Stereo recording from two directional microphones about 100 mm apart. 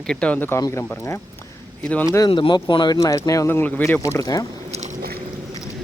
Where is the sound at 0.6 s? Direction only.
30° left (ahead or behind).